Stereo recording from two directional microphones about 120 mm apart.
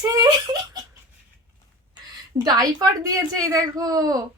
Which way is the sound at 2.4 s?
35° right (ahead or behind).